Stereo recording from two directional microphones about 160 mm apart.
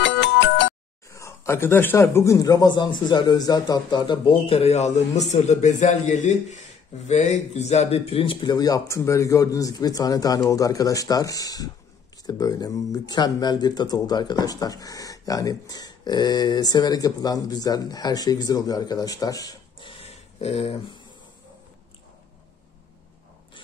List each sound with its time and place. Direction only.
0.0 s music: 90° left
1.1 s speech: 20° left (ahead or behind)
20.0 s a sound: 40° left (ahead or behind)